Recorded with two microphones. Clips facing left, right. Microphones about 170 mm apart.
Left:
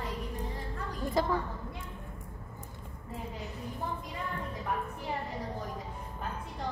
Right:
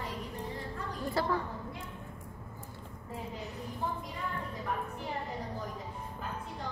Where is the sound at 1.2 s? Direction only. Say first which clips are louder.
Left 3 dB; 15° left (ahead or behind).